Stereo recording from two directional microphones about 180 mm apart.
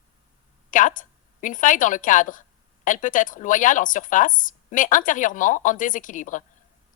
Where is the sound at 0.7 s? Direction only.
45° left (ahead or behind).